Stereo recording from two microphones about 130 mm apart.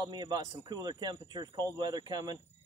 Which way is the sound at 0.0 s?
30° right (ahead or behind).